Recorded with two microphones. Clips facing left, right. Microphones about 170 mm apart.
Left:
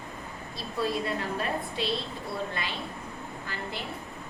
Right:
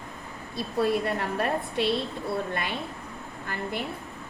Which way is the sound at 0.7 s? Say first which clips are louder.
Right 4 dB; 60° right (ahead or behind).